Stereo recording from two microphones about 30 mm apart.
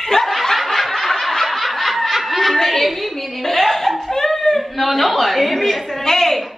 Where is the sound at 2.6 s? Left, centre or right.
Centre.